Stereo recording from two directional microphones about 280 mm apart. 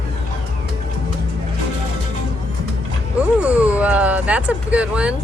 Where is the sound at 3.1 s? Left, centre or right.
Centre.